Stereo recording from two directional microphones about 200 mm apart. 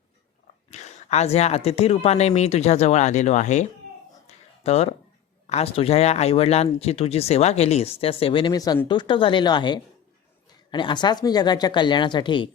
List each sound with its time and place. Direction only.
0.7 s speech: 35° left (ahead or behind)
4.3 s a sound: 30° left (ahead or behind)
5.5 s speech: 30° left (ahead or behind)